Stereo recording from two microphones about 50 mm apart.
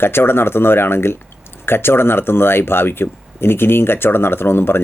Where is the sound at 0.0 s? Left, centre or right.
Left.